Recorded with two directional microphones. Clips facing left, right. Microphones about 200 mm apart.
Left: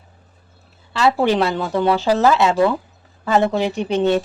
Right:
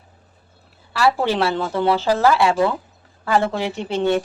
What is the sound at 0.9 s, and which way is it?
A woman's voice, 20° left (ahead or behind).